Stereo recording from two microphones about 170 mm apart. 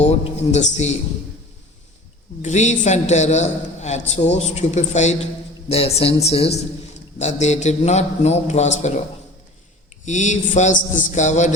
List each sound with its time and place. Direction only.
0.0 s a man's voice: 40° left (ahead or behind)
2.4 s a man's voice: 45° left (ahead or behind)
10.1 s a man's voice: 45° left (ahead or behind)